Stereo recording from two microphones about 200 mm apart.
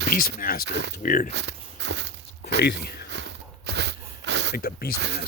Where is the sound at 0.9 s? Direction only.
45° left (ahead or behind).